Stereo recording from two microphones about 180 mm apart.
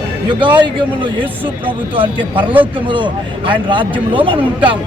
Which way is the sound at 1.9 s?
25° right (ahead or behind).